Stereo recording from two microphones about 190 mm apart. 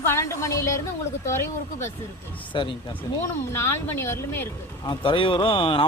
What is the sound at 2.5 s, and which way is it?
Speech, 25° left (ahead or behind).